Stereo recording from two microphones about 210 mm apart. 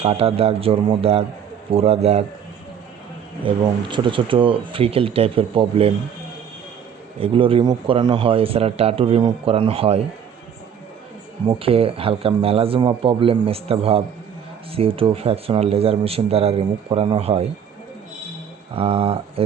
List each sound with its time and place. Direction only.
0.0 s speech: 30° right (ahead or behind)
3.4 s speech: 25° right (ahead or behind)
7.2 s speech: 25° right (ahead or behind)
11.4 s speech: 25° right (ahead or behind)
18.7 s speech: 25° right (ahead or behind)